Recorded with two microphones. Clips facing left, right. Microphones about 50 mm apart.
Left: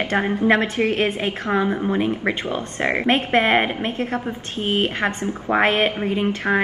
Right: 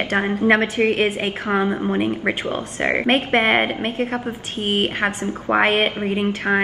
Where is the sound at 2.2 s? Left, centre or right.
Right.